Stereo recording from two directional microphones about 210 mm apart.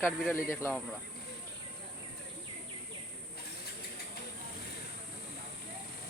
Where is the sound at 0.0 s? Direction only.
10° left (ahead or behind).